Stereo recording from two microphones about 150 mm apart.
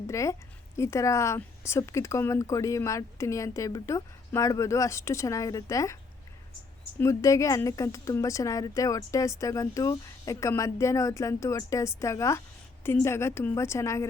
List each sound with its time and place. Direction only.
0.1 s a woman's voice: 20° left (ahead or behind)
7.0 s a woman's voice: 20° left (ahead or behind)